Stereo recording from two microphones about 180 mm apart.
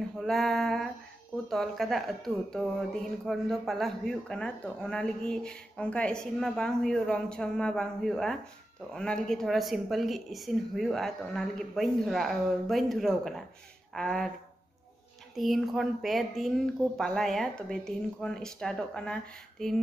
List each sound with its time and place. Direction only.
0.2 s speech: centre (ahead or behind)
15.3 s speech: centre (ahead or behind)